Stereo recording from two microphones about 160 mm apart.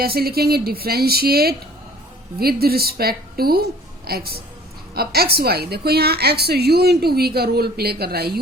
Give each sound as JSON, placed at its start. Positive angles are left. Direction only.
{"t": 0.0, "sound": "a woman's voice", "side_deg": -70}